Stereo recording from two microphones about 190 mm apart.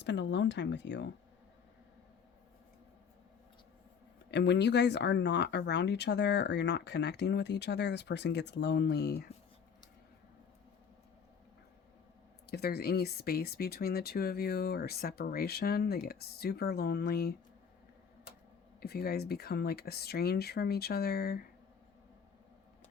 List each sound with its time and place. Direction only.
0.0 s speech: 70° left (ahead or behind)
4.3 s speech: 65° left (ahead or behind)
12.5 s speech: 55° left (ahead or behind)
18.8 s speech: 55° left (ahead or behind)